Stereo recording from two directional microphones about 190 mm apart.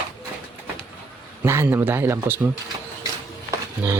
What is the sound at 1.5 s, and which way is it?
Speech, 15° right (ahead or behind).